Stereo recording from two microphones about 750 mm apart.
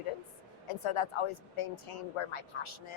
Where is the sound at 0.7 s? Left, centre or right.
Left.